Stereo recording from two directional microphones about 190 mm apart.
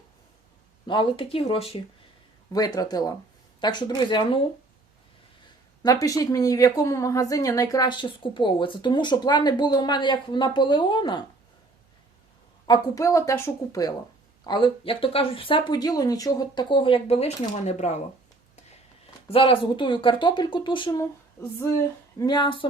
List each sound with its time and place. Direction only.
0.9 s a woman's voice: 25° left (ahead or behind)
5.8 s a woman's voice: 20° left (ahead or behind)
12.6 s a woman's voice: 20° left (ahead or behind); by 18.0 s 35° left (ahead or behind)
19.3 s a woman's voice: 30° left (ahead or behind)
22.2 s a woman's voice: 25° left (ahead or behind)